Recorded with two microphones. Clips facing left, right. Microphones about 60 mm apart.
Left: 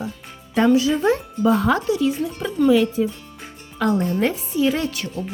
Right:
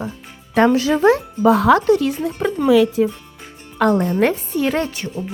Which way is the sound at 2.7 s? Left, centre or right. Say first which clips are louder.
Right 3 dB; right.